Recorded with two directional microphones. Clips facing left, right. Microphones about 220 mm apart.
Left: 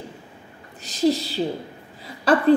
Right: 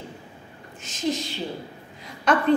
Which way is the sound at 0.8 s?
35° left (ahead or behind).